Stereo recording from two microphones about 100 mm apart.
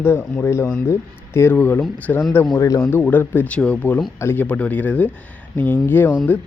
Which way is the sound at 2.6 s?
30° left (ahead or behind).